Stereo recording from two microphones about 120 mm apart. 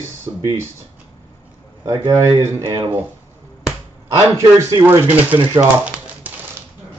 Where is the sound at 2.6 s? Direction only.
35° right (ahead or behind).